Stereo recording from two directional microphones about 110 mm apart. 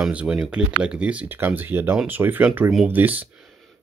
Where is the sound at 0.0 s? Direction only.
10° right (ahead or behind).